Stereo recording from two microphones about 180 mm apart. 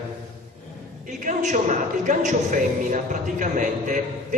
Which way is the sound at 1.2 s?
45° right (ahead or behind).